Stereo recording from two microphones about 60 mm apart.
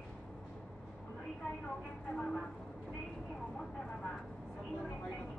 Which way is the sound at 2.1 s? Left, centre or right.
Centre.